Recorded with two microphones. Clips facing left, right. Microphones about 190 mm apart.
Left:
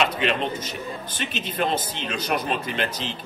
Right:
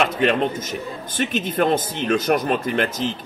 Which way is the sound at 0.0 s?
45° right (ahead or behind).